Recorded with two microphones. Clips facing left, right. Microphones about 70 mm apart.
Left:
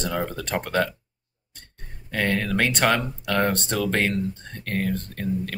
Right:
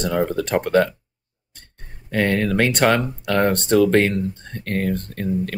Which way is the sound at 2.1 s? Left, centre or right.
Centre.